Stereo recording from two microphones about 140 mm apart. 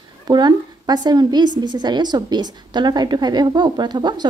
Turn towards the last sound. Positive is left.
turn(degrees=-30)  # may be behind; listen again after turning